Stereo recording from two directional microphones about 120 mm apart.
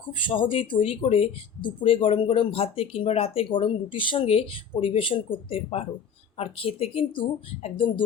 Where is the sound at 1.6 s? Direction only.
45° left (ahead or behind).